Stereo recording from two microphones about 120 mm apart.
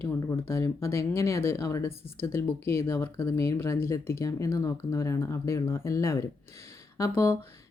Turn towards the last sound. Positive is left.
turn(degrees=25)  # may be behind; listen again after turning